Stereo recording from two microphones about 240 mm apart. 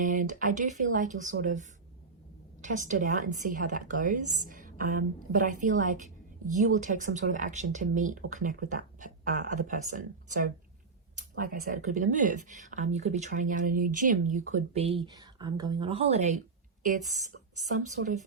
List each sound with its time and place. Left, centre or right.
0.0 s speech: right
2.6 s speech: right